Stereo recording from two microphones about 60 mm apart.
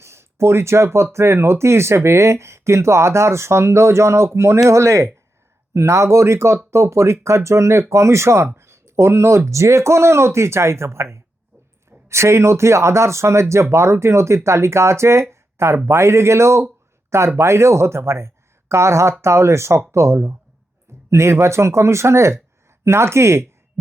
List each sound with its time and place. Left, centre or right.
0.0 s speech: right